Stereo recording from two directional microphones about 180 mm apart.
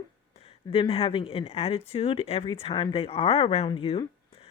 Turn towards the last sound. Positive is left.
turn(degrees=30)  # may be behind; listen again after turning